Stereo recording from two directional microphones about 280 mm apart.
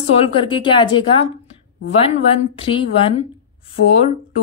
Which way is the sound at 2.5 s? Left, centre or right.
Centre.